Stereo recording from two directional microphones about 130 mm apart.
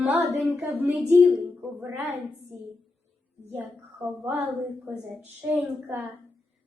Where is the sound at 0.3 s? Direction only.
Centre (ahead or behind); by 2.1 s 15° right (ahead or behind).